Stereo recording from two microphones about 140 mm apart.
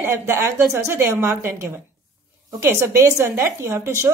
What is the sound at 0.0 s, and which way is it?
A woman's voice, 15° right (ahead or behind).